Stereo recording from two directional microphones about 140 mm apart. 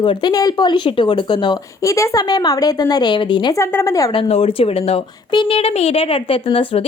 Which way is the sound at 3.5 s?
20° left (ahead or behind).